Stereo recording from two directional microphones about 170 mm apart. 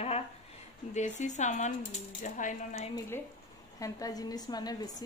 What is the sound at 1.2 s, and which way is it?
Speech, 45° left (ahead or behind).